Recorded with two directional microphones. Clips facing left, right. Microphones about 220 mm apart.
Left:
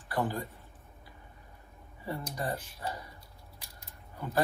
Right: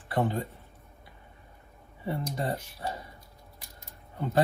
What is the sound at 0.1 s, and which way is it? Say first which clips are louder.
Speech: right 4 dB; 25° right (ahead or behind).